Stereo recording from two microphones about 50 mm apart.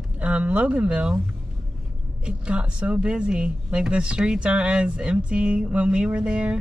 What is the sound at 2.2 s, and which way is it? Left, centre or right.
Speech, right.